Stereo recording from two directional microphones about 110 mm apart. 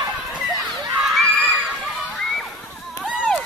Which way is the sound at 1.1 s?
Centre (ahead or behind).